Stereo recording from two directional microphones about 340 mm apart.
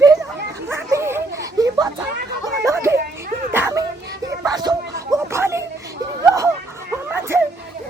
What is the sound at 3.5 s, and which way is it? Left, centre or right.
Dog, centre.